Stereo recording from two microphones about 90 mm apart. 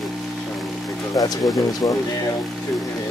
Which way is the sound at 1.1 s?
40° left (ahead or behind).